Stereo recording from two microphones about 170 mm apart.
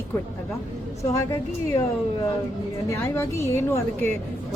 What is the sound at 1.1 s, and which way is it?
Speech, 15° left (ahead or behind).